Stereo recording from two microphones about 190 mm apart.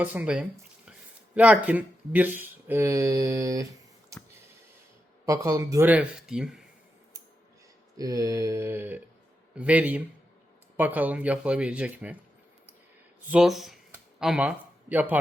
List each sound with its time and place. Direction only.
0.0 s speech: 10° right (ahead or behind)
5.2 s speech: 15° right (ahead or behind)
5.9 s speech: 5° right (ahead or behind)
7.9 s speech: 20° right (ahead or behind)
13.3 s speech: centre (ahead or behind)